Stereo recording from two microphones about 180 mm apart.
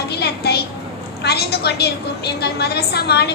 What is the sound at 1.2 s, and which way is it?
A woman's voice, 65° left (ahead or behind).